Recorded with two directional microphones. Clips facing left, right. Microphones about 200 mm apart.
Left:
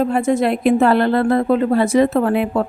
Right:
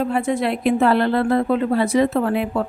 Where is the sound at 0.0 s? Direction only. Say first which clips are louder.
Left 4 dB; 45° left (ahead or behind).